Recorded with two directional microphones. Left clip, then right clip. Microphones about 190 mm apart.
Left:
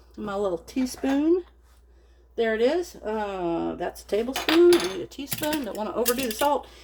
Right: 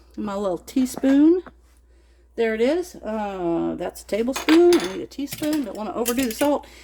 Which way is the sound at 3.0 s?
50° right (ahead or behind).